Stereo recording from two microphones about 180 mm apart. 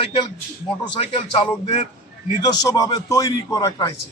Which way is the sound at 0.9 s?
30° left (ahead or behind).